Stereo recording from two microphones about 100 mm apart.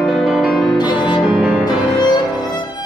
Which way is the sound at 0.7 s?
50° left (ahead or behind).